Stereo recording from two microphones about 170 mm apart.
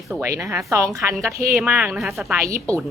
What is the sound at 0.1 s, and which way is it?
Speech, 15° right (ahead or behind).